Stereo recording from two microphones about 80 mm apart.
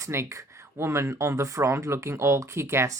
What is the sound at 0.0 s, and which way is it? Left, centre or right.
Speech, right.